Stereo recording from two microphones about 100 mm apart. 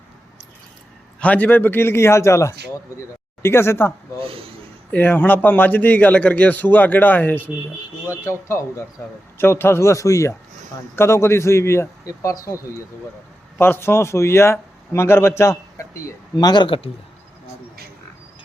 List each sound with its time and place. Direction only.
1.2 s speech: 15° left (ahead or behind)
4.2 s speech: 70° right (ahead or behind)
4.9 s a man's voice: 15° left (ahead or behind)
8.2 s speech: 30° left (ahead or behind)
13.6 s speech: 25° left (ahead or behind); by 16.6 s 40° left (ahead or behind)
16.6 s a man's voice: 60° left (ahead or behind)